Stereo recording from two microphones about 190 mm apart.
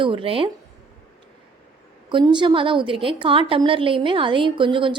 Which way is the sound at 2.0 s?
25° right (ahead or behind).